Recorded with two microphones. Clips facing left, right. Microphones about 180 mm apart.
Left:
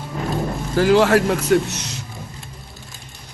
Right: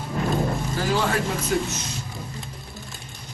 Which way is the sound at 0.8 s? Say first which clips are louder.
Left 11 dB; 70° left (ahead or behind).